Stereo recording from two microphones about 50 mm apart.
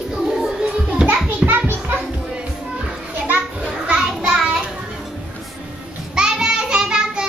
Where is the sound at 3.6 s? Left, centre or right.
Centre.